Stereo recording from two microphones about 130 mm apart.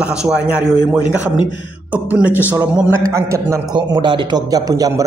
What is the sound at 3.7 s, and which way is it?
Speech, 40° right (ahead or behind).